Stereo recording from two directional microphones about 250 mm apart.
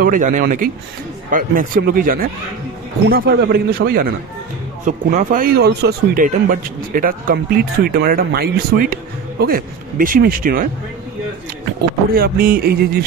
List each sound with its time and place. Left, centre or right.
0.0 s speech: right
12.2 s speech: right